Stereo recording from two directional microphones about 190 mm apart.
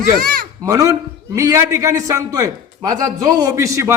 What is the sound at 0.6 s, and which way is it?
A man's voice, 15° right (ahead or behind).